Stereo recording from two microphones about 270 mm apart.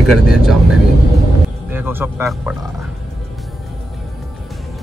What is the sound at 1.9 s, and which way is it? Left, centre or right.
Speech, centre.